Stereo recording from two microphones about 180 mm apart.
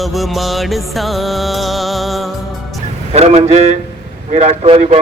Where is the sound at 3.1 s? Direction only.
35° right (ahead or behind).